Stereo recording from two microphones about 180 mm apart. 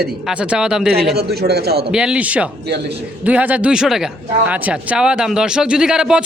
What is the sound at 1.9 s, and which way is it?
Speech, 5° right (ahead or behind).